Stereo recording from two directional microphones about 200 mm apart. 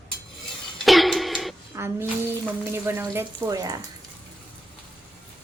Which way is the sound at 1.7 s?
15° right (ahead or behind).